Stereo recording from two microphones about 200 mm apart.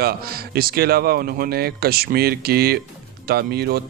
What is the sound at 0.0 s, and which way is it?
Speech, 50° right (ahead or behind).